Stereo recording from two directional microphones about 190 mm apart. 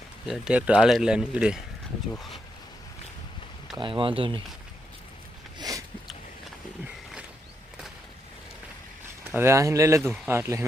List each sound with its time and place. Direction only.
0.3 s speech: 5° right (ahead or behind)
3.8 s speech: 25° right (ahead or behind)
5.5 s a sound: 20° right (ahead or behind)
9.3 s speech: 15° right (ahead or behind)